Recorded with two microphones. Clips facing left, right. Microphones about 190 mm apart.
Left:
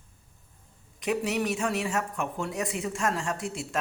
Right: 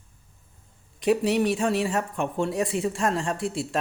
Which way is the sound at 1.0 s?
35° right (ahead or behind).